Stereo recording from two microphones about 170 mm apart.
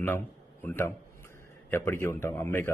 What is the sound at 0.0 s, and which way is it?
A man's voice, 10° left (ahead or behind).